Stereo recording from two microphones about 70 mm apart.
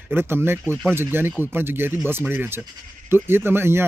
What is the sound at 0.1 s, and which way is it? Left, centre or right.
Speech, right.